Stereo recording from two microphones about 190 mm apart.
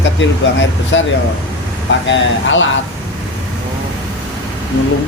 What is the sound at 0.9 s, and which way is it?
Speech, 70° left (ahead or behind).